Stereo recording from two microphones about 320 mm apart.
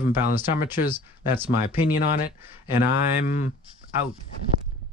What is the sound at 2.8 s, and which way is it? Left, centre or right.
Speech, left.